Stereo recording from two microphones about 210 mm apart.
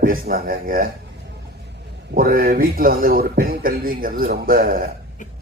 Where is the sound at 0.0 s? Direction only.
45° right (ahead or behind).